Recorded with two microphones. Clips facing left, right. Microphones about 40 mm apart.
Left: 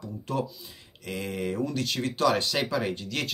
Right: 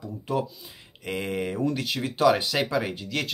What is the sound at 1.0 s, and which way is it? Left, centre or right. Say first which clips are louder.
Speech: right 3 dB; right.